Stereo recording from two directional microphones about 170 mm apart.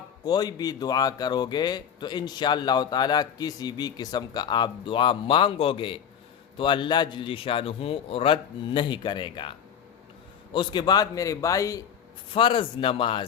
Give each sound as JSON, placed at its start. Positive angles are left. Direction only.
{"t": 0.3, "sound": "a man's voice", "side_deg": 25}
{"t": 12.3, "sound": "a man's voice", "side_deg": 30}